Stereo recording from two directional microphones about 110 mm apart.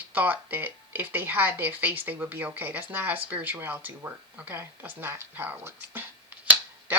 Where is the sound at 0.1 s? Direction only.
15° right (ahead or behind).